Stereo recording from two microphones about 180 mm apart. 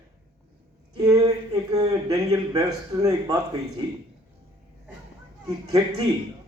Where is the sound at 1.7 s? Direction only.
20° right (ahead or behind).